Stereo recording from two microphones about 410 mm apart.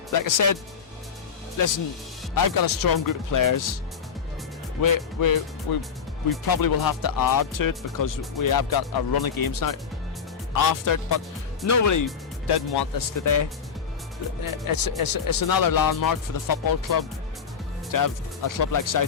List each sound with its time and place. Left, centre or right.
0.1 s speech: left
2.3 s speech: left
4.8 s speech: left
12.5 s speech: left
14.7 s speech: left